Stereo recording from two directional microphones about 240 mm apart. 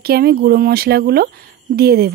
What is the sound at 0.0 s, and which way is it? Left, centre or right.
Speech, right.